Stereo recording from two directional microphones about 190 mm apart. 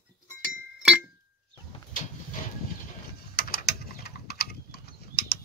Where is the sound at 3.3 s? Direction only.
55° left (ahead or behind).